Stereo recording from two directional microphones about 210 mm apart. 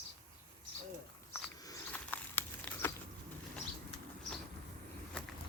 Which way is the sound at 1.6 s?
10° left (ahead or behind).